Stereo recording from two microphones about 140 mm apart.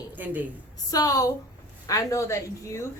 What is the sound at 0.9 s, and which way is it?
Speech, 25° left (ahead or behind).